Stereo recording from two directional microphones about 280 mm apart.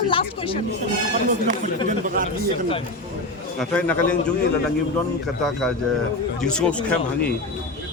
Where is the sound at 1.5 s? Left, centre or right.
Right.